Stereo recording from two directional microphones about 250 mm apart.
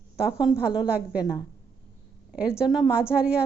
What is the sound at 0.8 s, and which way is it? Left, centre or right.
Speech, centre.